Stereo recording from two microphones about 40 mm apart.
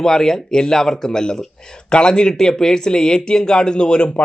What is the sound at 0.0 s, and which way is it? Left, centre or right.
Speech, centre.